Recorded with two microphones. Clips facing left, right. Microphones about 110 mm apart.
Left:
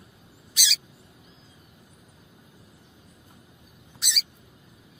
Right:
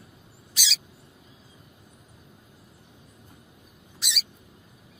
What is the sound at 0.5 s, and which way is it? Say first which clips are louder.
Rodents: left 1 dB; 35° right (ahead or behind).